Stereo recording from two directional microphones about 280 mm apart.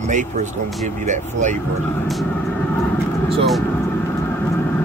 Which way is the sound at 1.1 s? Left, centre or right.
Right.